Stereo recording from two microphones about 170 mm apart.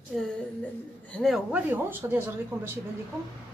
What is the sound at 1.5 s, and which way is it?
A woman's voice, 10° right (ahead or behind).